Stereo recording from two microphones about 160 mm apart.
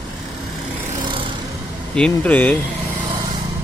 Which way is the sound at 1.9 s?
5° left (ahead or behind).